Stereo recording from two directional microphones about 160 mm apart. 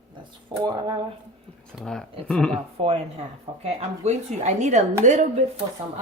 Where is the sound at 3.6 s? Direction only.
45° right (ahead or behind).